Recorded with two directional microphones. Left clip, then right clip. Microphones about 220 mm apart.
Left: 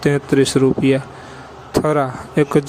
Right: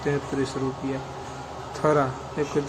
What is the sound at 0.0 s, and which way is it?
Speech, 45° left (ahead or behind).